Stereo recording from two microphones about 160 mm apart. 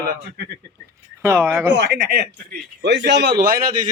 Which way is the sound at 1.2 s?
15° right (ahead or behind).